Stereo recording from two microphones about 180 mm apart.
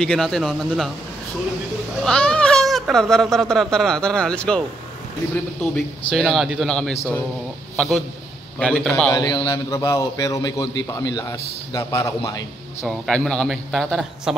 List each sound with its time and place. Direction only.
0.0 s speech: centre (ahead or behind)
2.0 s speech: 5° left (ahead or behind)
6.1 s a man's voice: centre (ahead or behind)
9.1 s a man's voice: 25° left (ahead or behind)
12.8 s speech: 5° left (ahead or behind)